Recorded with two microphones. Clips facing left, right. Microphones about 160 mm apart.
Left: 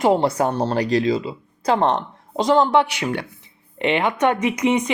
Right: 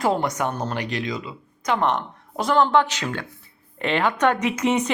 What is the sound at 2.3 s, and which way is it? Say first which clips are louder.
Speech: left 3 dB; 20° left (ahead or behind).